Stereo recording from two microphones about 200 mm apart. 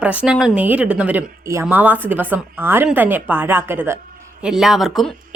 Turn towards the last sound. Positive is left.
turn(degrees=0)  # may be behind; listen again after turning